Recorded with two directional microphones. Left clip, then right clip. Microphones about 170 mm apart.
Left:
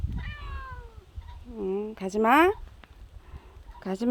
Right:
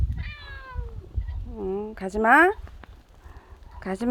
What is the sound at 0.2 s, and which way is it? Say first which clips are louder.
Cat: even; 15° right (ahead or behind).